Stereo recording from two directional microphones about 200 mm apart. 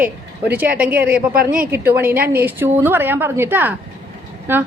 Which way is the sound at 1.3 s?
45° right (ahead or behind).